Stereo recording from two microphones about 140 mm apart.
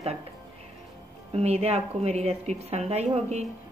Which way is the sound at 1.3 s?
50° right (ahead or behind).